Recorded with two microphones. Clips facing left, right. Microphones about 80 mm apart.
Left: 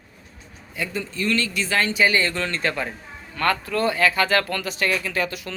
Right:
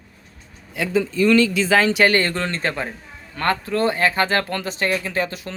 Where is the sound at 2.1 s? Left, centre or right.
Right.